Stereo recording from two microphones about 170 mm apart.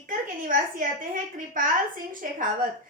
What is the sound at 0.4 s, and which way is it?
A woman's voice, 55° right (ahead or behind).